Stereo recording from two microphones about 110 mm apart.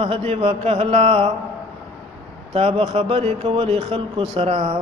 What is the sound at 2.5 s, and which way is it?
Speech, 65° right (ahead or behind).